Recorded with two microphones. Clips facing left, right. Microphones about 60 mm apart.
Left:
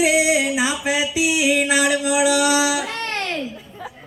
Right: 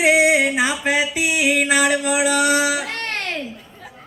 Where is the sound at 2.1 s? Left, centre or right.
Right.